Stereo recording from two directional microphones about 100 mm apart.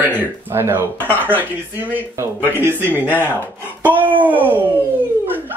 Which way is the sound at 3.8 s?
15° right (ahead or behind).